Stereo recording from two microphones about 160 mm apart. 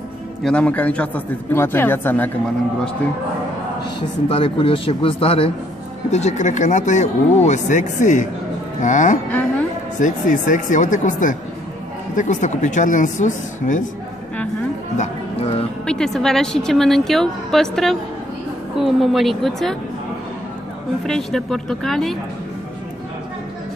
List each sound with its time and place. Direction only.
0.4 s speech: 5° left (ahead or behind)
4.3 s speech: 35° left (ahead or behind)
6.1 s speech: 45° left (ahead or behind)
15.0 s music: 40° left (ahead or behind)
15.8 s a woman's voice: 5° left (ahead or behind)
21.0 s a woman's voice: centre (ahead or behind)